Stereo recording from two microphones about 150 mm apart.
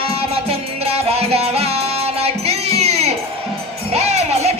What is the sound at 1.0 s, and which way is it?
Music, 40° right (ahead or behind).